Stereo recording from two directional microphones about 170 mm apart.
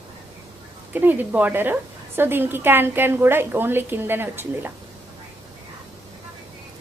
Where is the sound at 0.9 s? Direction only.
10° right (ahead or behind).